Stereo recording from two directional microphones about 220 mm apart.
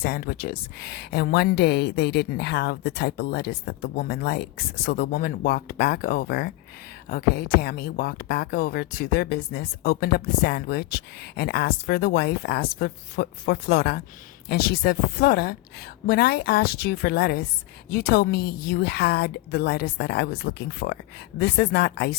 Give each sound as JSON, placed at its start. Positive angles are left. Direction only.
{"t": 0.0, "sound": "speech", "side_deg": 45}